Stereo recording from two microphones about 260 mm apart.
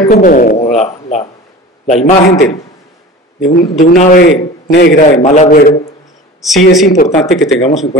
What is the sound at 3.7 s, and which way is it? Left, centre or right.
A man's voice, left.